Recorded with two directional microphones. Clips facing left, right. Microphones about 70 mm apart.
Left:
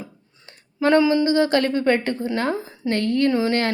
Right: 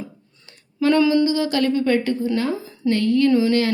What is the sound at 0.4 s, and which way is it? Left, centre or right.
A woman's voice, left.